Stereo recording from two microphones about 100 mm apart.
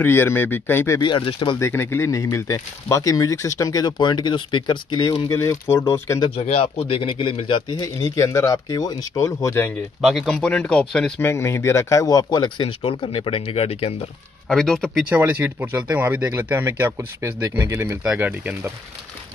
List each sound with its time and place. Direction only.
0.0 s speech: 25° left (ahead or behind)
1.0 s speech: 55° left (ahead or behind)
1.6 s speech: 25° left (ahead or behind); by 5.1 s 50° left (ahead or behind)
5.3 s speech: 30° left (ahead or behind)
6.3 s speech: 75° left (ahead or behind); by 7.8 s 60° left (ahead or behind)
7.8 s speech: 30° left (ahead or behind)
10.0 s speech: 5° left (ahead or behind)
11.1 s speech: 30° left (ahead or behind); by 12.6 s 45° left (ahead or behind)
12.6 s speech: 70° left (ahead or behind)
14.5 s speech: 5° left (ahead or behind)
15.0 s speech: 15° right (ahead or behind)
18.0 s speech: 15° right (ahead or behind)